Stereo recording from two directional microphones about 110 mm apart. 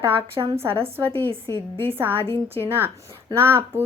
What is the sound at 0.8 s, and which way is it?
Speech, 20° right (ahead or behind).